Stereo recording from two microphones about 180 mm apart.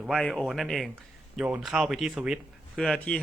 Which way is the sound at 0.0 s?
Centre (ahead or behind).